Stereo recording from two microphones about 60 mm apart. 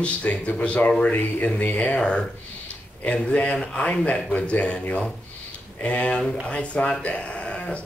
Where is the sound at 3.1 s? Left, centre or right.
Centre.